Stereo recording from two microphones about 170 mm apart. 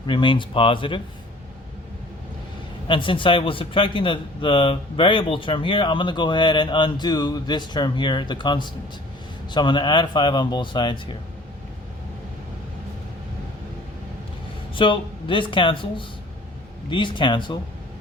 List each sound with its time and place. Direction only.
0.1 s speech: 30° left (ahead or behind)
2.8 s speech: 30° left (ahead or behind)
14.8 s speech: 30° left (ahead or behind)